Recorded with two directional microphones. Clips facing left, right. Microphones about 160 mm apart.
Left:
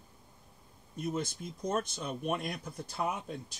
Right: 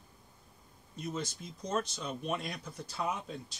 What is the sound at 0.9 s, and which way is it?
Speech, 55° left (ahead or behind).